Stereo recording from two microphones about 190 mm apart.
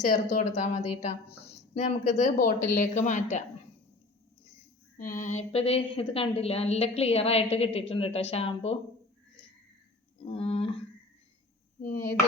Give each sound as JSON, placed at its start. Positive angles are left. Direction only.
{"t": 0.0, "sound": "a woman's voice", "side_deg": 40}
{"t": 4.9, "sound": "a woman's voice", "side_deg": 45}
{"t": 10.2, "sound": "a sound", "side_deg": 30}